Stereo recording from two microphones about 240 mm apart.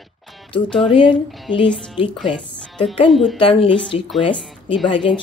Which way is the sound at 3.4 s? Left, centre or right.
Left.